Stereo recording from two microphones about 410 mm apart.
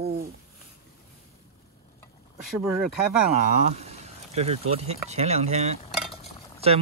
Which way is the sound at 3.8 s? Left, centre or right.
Centre.